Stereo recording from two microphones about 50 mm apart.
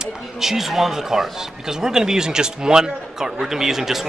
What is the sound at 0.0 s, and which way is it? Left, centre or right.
Speech, centre.